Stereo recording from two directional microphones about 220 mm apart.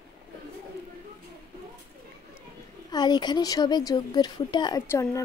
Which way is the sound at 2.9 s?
20° left (ahead or behind).